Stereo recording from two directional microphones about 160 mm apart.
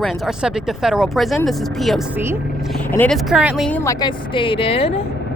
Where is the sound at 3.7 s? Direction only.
20° left (ahead or behind).